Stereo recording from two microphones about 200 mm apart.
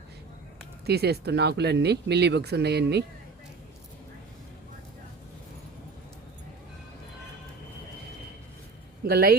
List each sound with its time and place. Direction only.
0.9 s speech: 55° right (ahead or behind)
9.0 s speech: 50° right (ahead or behind)